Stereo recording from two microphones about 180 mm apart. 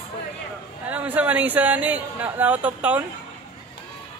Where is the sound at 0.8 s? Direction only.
10° right (ahead or behind).